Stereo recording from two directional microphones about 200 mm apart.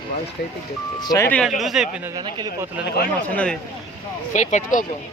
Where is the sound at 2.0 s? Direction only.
20° right (ahead or behind).